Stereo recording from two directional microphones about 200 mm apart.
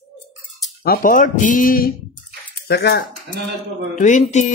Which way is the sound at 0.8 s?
45° left (ahead or behind).